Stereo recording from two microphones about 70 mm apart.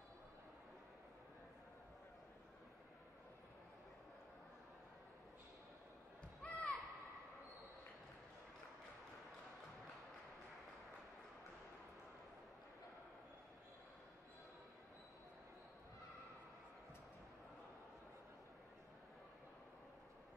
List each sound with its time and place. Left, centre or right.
6.4 s basketball bounce: centre